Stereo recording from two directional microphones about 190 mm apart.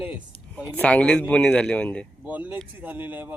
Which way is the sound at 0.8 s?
5° left (ahead or behind).